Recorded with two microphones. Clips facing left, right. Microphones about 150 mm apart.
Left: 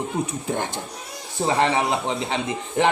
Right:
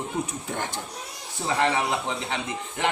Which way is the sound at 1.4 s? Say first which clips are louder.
Left 4 dB; 35° left (ahead or behind).